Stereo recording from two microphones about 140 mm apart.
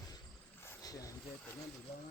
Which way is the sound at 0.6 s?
25° left (ahead or behind).